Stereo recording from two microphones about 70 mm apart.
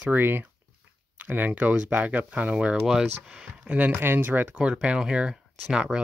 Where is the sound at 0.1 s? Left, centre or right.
Right; by 3.7 s centre.